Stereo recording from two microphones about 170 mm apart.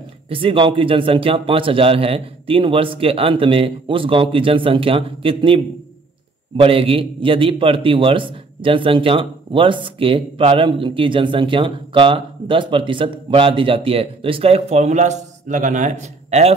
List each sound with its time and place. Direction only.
0.3 s a man's voice: 30° right (ahead or behind)